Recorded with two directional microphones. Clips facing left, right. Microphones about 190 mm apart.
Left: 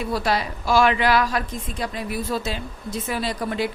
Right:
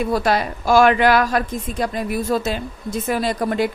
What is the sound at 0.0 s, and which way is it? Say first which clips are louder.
A woman's voice: right 5 dB; 50° right (ahead or behind).